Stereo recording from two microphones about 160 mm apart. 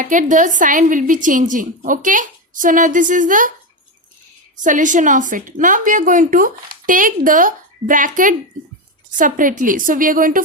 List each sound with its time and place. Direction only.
0.0 s a woman's voice: 55° right (ahead or behind)
4.6 s a woman's voice: 55° right (ahead or behind)